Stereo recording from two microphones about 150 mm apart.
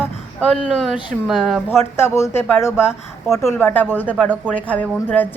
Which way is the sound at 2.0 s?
15° left (ahead or behind).